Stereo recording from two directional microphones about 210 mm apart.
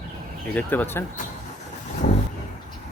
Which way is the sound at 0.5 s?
10° left (ahead or behind).